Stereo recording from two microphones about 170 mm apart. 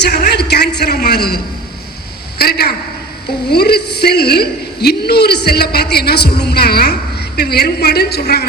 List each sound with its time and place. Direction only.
0.0 s a man's voice: 70° left (ahead or behind)
2.4 s a man's voice: 65° left (ahead or behind)